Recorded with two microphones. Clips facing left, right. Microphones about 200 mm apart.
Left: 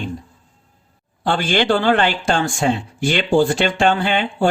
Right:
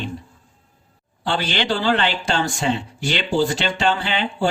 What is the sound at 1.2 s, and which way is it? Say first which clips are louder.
Speech: left 5 dB; 50° left (ahead or behind).